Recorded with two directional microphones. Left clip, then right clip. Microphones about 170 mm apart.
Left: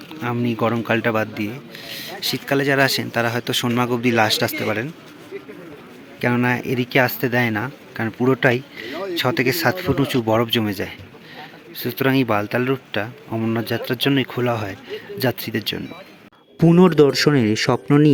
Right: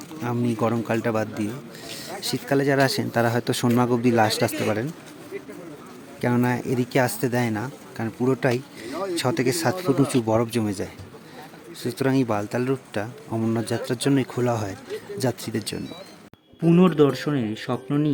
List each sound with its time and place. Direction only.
0.2 s speech: centre (ahead or behind)
6.2 s speech: 5° right (ahead or behind)
16.8 s speech: 30° left (ahead or behind)